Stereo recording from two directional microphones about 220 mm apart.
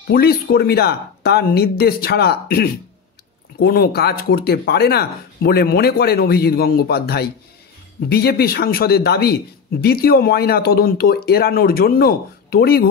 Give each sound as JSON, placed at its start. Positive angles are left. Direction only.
{"t": 0.1, "sound": "a man's voice", "side_deg": 45}